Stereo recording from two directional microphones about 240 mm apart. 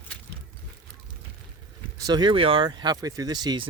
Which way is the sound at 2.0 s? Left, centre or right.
Centre.